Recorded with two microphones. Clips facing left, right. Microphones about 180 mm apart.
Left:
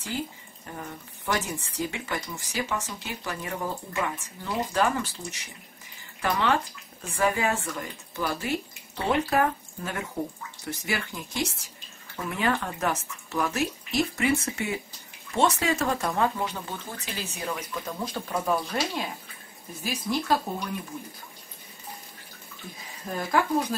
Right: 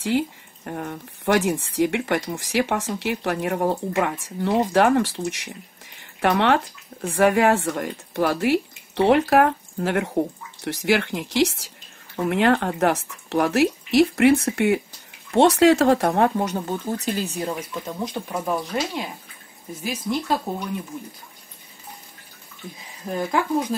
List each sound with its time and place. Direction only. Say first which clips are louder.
0.1 s speech: right 10 dB; 70° right (ahead or behind); by 20.3 s 20° right (ahead or behind)
23.0 s speech: right 5 dB; 20° right (ahead or behind)